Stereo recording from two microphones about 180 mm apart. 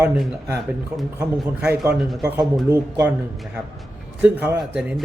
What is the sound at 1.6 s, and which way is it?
A man's voice, 10° right (ahead or behind).